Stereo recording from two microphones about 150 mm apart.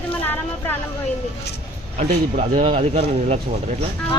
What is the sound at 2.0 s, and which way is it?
Speech, 50° right (ahead or behind).